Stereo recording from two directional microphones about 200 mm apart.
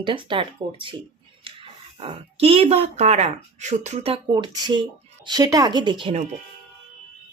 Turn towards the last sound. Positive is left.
turn(degrees=-25)  # may be behind; listen again after turning